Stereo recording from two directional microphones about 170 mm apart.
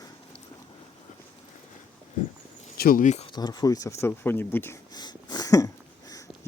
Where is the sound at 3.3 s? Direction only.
25° left (ahead or behind).